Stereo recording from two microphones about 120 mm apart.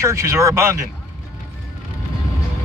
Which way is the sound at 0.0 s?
25° right (ahead or behind).